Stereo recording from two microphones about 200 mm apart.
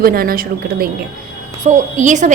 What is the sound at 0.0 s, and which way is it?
Speech, 50° right (ahead or behind).